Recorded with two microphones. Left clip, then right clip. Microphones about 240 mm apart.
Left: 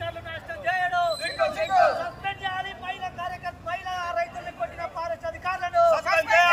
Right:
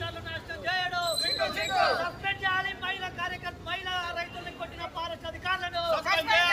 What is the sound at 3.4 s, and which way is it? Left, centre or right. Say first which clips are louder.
Vehicle: left 3 dB; centre.